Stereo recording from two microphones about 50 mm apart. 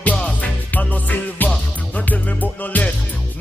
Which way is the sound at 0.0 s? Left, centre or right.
Left.